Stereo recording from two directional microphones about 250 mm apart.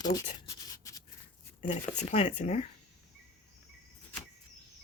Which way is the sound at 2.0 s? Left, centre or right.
Left.